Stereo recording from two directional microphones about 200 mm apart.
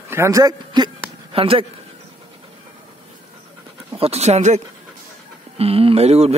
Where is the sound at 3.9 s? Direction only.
30° right (ahead or behind).